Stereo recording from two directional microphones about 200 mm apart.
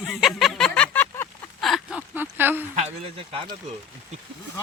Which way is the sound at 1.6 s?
Centre (ahead or behind).